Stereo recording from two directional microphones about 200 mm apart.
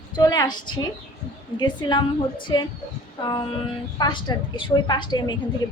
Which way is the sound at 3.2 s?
20° left (ahead or behind).